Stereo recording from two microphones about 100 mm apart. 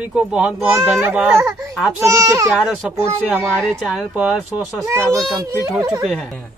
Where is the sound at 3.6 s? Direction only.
5° right (ahead or behind).